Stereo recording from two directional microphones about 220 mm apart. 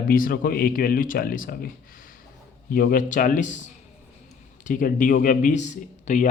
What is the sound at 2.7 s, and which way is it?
Speech, 40° left (ahead or behind).